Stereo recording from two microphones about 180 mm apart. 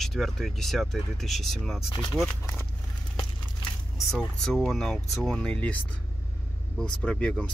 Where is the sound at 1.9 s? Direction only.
25° left (ahead or behind).